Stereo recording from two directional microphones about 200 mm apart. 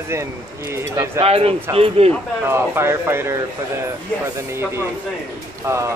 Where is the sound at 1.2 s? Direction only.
30° right (ahead or behind).